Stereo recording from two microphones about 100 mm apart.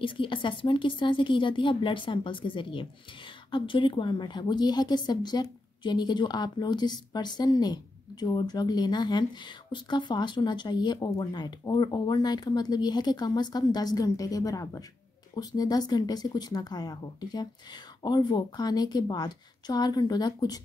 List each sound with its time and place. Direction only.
0.0 s a woman's voice: 55° left (ahead or behind)